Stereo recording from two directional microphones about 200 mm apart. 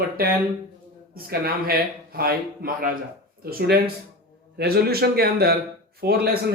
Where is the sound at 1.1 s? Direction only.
50° right (ahead or behind).